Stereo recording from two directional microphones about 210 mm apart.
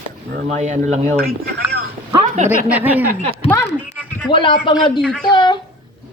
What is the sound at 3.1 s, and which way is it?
Speech, 30° right (ahead or behind).